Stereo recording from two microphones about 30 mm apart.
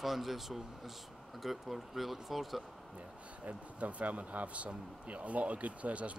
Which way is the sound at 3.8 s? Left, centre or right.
Right.